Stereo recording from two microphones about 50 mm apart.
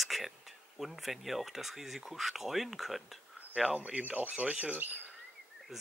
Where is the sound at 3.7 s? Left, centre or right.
Right.